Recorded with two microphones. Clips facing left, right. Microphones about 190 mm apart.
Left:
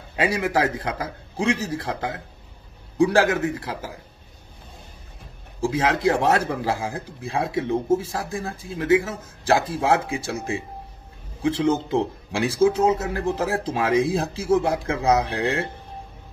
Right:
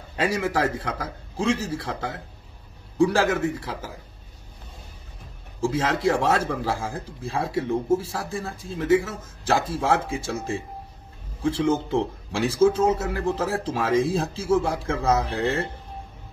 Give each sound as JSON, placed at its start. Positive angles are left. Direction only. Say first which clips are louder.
{"t": 0.2, "sound": "speech", "louder": "left 2 dB", "side_deg": 15}
{"t": 5.6, "sound": "speech", "louder": "left 2 dB", "side_deg": 15}
{"t": 11.9, "sound": "speech", "louder": "left 1 dB", "side_deg": 15}